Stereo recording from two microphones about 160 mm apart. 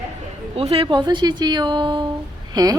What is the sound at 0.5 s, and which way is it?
A woman's voice, 35° right (ahead or behind).